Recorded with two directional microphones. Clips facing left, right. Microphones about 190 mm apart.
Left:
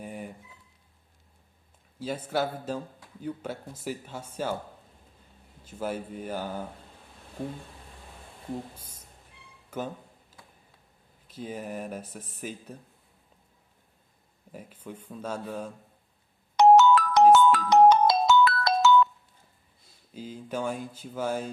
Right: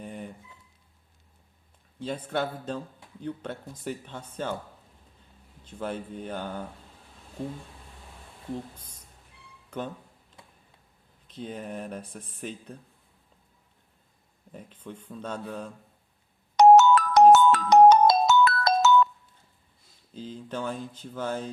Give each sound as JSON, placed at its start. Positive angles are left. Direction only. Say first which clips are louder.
{"t": 0.0, "sound": "a sound", "louder": "even", "side_deg": 5}
{"t": 2.0, "sound": "a man's voice", "louder": "left 1 dB", "side_deg": 5}
{"t": 5.6, "sound": "a man's voice", "louder": "left 1 dB", "side_deg": 5}
{"t": 8.7, "sound": "a man's voice", "louder": "left 1 dB", "side_deg": 10}
{"t": 9.6, "sound": "a sound", "louder": "even", "side_deg": 5}
{"t": 11.3, "sound": "speech", "louder": "even", "side_deg": 5}
{"t": 14.5, "sound": "a man's voice", "louder": "even", "side_deg": 10}
{"t": 16.6, "sound": "music", "louder": "right 2 dB", "side_deg": -45}
{"t": 20.1, "sound": "a man's voice", "louder": "left 1 dB", "side_deg": 10}